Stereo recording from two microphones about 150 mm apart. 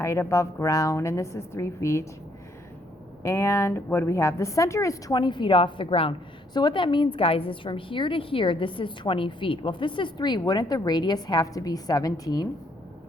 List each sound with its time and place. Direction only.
0.0 s a woman's voice: 20° left (ahead or behind)
3.2 s a woman's voice: 20° left (ahead or behind)